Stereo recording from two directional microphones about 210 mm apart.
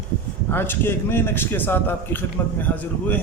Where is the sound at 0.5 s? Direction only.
10° left (ahead or behind).